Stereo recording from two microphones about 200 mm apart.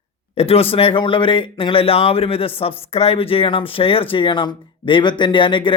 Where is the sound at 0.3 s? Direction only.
30° left (ahead or behind).